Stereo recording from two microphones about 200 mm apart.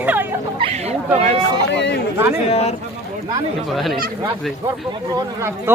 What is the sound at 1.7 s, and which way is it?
Chatter, 60° left (ahead or behind).